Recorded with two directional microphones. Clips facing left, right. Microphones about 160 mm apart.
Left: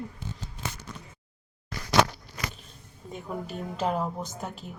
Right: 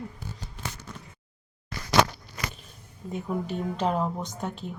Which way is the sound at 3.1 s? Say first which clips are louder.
Right 5 dB; centre (ahead or behind).